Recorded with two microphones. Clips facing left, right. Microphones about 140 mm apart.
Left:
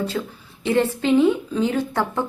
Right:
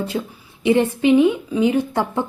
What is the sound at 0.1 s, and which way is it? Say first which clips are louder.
A woman's voice: right 2 dB; 20° right (ahead or behind).